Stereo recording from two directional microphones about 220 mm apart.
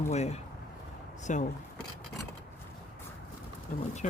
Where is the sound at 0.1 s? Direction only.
30° left (ahead or behind).